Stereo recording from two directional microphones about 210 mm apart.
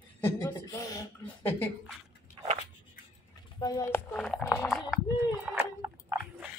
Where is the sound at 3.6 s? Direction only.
10° left (ahead or behind).